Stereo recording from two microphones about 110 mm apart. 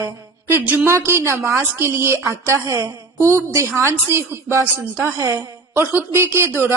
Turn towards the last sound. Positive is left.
turn(degrees=-20)  # may be behind; listen again after turning